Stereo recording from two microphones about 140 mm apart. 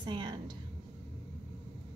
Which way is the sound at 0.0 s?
35° right (ahead or behind).